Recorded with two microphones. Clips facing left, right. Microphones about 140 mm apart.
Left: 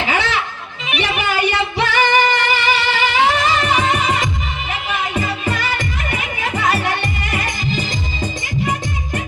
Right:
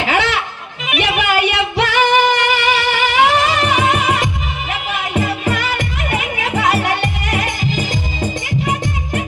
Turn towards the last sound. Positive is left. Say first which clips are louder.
# right 3 dB
turn(degrees=-70)  # may be behind; listen again after turning